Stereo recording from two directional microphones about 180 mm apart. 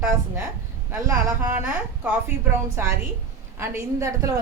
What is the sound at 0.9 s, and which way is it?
A woman's voice, 10° right (ahead or behind).